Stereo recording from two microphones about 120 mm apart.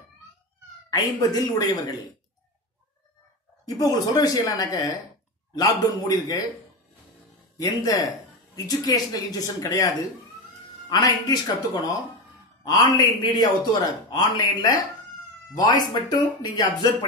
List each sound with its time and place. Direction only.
0.8 s a man's voice: 35° left (ahead or behind)
3.6 s a man's voice: 30° left (ahead or behind)
7.5 s a man's voice: 30° left (ahead or behind)